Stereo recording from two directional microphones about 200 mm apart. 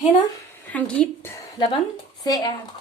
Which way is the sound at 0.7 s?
5° left (ahead or behind).